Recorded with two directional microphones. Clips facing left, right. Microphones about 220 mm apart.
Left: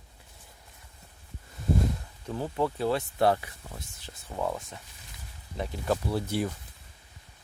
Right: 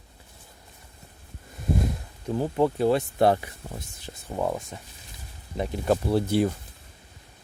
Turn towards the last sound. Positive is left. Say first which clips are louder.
# right 7 dB
turn(degrees=-30)  # may be behind; listen again after turning